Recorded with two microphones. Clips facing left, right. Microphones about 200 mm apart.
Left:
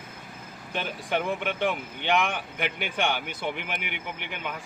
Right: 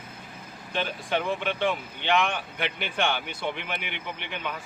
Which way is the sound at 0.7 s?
15° left (ahead or behind).